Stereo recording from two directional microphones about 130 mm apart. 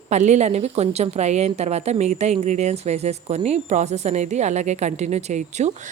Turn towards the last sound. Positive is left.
turn(degrees=-65)  # may be behind; listen again after turning